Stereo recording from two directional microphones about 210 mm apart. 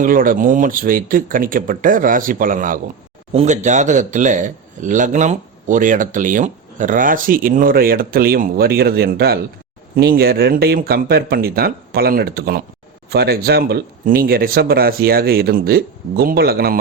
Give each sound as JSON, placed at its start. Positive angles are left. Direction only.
{"t": 0.0, "sound": "a man's voice", "side_deg": -40}